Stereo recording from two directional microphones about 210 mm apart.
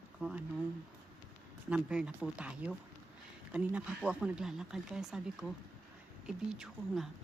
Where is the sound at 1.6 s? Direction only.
5° right (ahead or behind).